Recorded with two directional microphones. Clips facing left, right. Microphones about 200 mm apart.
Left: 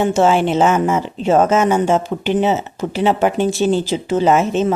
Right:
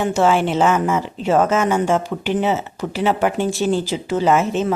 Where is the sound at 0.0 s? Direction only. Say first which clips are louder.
Left 3 dB; 25° left (ahead or behind).